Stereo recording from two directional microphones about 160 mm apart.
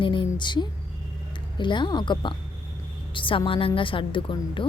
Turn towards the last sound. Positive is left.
turn(degrees=30)  # may be behind; listen again after turning